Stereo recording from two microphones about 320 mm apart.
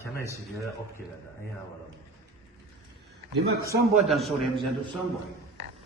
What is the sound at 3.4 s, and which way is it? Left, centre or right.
Speech, right.